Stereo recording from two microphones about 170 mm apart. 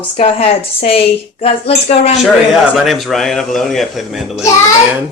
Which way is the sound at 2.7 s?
Centre (ahead or behind).